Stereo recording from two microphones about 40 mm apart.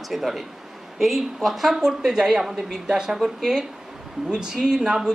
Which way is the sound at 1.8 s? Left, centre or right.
Centre.